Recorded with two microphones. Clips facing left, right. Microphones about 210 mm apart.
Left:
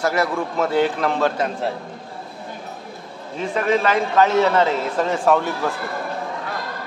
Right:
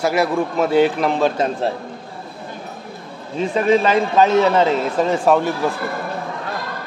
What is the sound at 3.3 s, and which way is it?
A man's voice, 25° right (ahead or behind).